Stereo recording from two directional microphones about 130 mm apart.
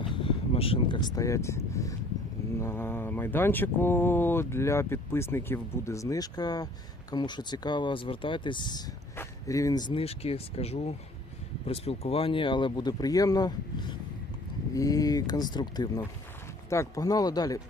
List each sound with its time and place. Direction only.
0.0 s speech: 45° left (ahead or behind)
9.1 s a sound: 25° left (ahead or behind)
9.9 s speech: 50° left (ahead or behind); by 16.0 s 35° left (ahead or behind)
16.6 s speech: 20° left (ahead or behind)